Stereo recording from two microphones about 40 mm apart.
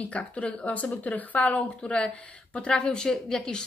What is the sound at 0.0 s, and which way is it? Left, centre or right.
A woman's voice, left.